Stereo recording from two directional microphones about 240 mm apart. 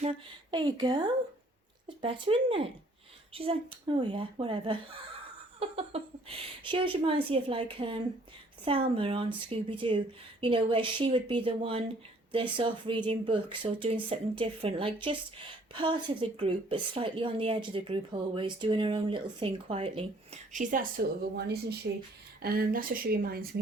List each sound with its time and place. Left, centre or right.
0.0 s speech: right